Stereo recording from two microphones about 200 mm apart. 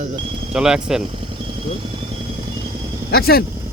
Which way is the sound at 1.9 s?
25° right (ahead or behind).